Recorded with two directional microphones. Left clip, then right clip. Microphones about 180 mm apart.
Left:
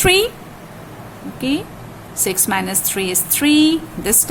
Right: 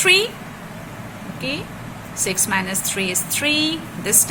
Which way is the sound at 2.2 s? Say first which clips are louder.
Left 2 dB; 60° left (ahead or behind).